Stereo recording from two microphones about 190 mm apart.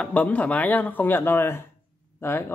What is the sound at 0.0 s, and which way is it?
Speech, 5° left (ahead or behind).